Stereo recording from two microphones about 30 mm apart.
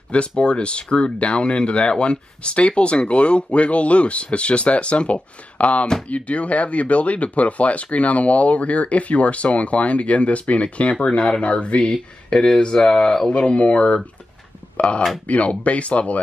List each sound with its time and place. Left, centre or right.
0.4 s speech: left
13.5 s speech: left